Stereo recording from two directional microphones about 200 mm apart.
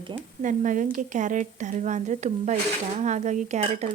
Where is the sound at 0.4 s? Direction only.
40° right (ahead or behind).